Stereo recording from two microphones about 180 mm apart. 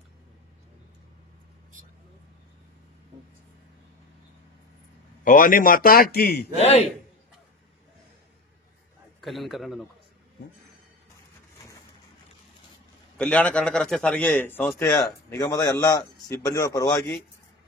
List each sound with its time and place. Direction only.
5.2 s a man's voice: 50° left (ahead or behind)
6.6 s a man's voice: 35° left (ahead or behind)
9.2 s a man's voice: centre (ahead or behind)
13.2 s a man's voice: 5° left (ahead or behind)